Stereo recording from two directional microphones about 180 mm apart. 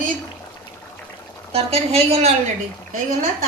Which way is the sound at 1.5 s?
35° right (ahead or behind).